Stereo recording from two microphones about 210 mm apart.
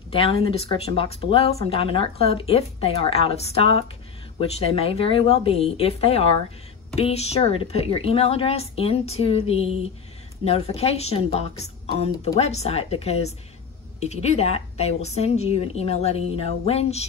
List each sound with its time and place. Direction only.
0.1 s a woman's voice: 25° left (ahead or behind)